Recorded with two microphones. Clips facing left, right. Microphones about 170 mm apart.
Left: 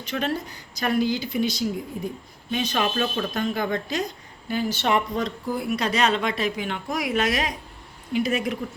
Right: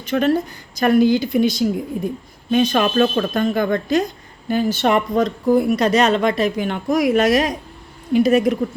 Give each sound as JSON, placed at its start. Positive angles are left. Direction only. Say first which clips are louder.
{"t": 0.0, "sound": "a woman's voice", "louder": "right 9 dB", "side_deg": -50}